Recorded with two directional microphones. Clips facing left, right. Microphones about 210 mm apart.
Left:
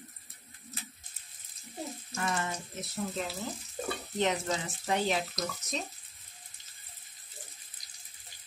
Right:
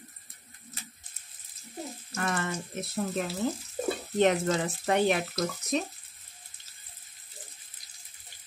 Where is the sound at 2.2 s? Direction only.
60° right (ahead or behind).